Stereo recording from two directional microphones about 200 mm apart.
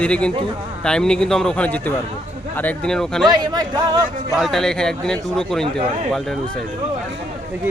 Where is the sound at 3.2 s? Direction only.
20° right (ahead or behind).